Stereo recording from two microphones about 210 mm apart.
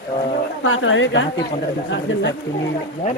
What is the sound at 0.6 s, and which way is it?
Speech, 65° left (ahead or behind).